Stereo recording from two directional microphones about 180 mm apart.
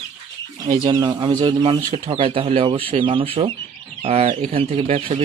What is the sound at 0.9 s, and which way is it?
A man's voice, 20° right (ahead or behind).